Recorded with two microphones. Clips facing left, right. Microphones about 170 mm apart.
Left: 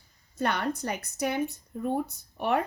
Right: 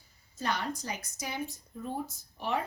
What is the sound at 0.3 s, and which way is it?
Speech, 60° left (ahead or behind).